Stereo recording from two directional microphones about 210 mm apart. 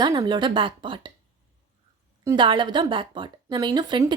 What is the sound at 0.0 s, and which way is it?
A woman's voice, 20° right (ahead or behind).